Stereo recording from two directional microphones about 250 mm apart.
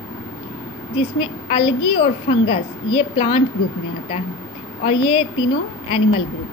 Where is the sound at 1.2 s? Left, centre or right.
Centre.